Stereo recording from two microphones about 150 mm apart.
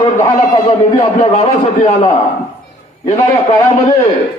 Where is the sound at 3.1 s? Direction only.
20° left (ahead or behind).